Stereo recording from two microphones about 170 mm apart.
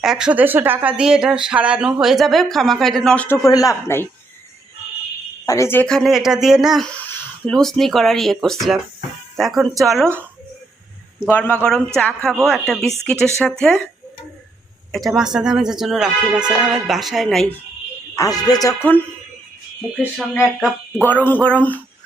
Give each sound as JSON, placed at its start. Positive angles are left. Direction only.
{"t": 0.0, "sound": "speech", "side_deg": -5}
{"t": 3.3, "sound": "speech", "side_deg": 20}
{"t": 5.5, "sound": "speech", "side_deg": 15}
{"t": 6.9, "sound": "speech", "side_deg": 10}
{"t": 11.3, "sound": "speech", "side_deg": 10}
{"t": 14.9, "sound": "speech", "side_deg": 0}
{"t": 18.2, "sound": "speech", "side_deg": 20}
{"t": 20.0, "sound": "speech", "side_deg": -5}
{"t": 21.0, "sound": "speech", "side_deg": 10}